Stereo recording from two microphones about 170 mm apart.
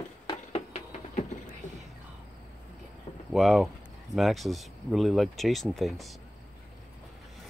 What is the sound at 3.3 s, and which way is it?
Speech, centre (ahead or behind).